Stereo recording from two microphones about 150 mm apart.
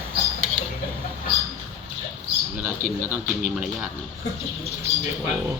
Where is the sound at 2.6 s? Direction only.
15° right (ahead or behind).